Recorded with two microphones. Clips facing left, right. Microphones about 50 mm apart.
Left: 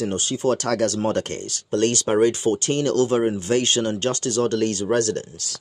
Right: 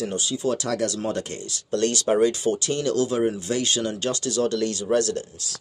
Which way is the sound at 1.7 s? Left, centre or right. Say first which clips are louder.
Left 2 dB; left.